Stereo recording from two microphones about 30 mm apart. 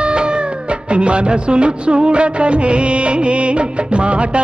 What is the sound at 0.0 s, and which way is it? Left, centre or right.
Music, right.